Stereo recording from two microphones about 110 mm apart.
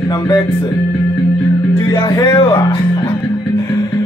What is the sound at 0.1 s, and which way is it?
Music, 40° left (ahead or behind).